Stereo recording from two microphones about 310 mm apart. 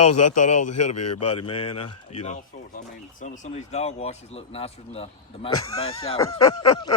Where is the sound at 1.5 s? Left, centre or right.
Centre.